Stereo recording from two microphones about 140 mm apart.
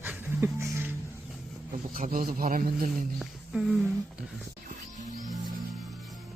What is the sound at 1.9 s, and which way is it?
Speech, 85° right.